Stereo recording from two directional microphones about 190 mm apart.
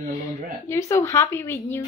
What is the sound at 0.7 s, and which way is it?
Speech, 15° left (ahead or behind).